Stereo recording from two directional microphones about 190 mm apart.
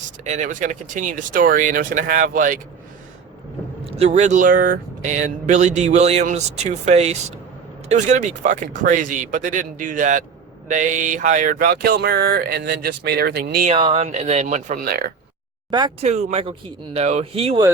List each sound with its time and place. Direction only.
0.3 s a sound: 40° right (ahead or behind)
3.8 s speech: 30° right (ahead or behind)
7.9 s a sound: 40° right (ahead or behind); by 13.7 s 55° right (ahead or behind)
13.7 s speech: 30° right (ahead or behind); by 15.1 s 50° right (ahead or behind)
15.7 s speech: 20° right (ahead or behind)
16.0 s speech: 35° right (ahead or behind)